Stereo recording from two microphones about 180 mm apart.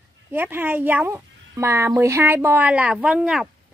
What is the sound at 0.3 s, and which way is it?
Speech, 10° right (ahead or behind).